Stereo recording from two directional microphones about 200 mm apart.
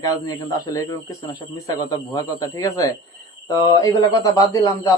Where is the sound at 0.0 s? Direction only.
15° left (ahead or behind).